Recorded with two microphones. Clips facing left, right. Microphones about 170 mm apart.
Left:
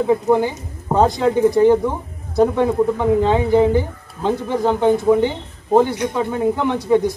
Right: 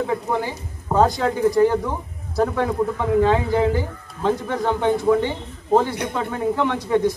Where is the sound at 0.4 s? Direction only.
25° left (ahead or behind).